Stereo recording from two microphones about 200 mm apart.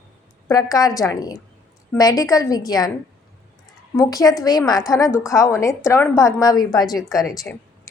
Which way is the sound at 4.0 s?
20° left (ahead or behind).